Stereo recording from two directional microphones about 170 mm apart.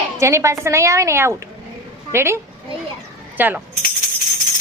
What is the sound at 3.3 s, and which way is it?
Mechanisms, 10° right (ahead or behind).